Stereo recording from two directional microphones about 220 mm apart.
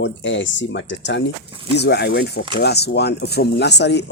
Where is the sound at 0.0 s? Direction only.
55° left (ahead or behind).